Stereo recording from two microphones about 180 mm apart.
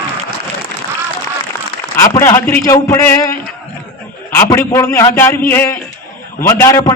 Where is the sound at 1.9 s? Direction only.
15° left (ahead or behind).